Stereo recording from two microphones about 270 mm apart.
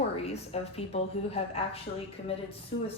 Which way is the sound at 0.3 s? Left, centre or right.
Left.